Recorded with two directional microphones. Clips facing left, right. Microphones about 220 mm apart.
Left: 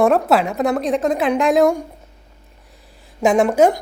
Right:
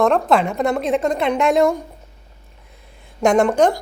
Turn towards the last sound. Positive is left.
turn(degrees=5)  # may be behind; listen again after turning